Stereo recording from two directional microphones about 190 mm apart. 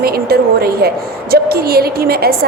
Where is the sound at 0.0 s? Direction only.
55° right (ahead or behind).